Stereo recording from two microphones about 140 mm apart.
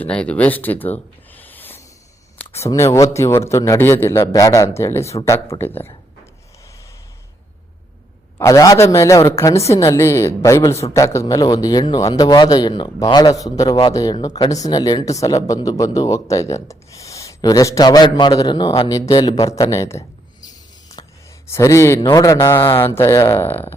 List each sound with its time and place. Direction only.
0.0 s a man's voice: 10° left (ahead or behind)
8.4 s a man's voice: 25° left (ahead or behind)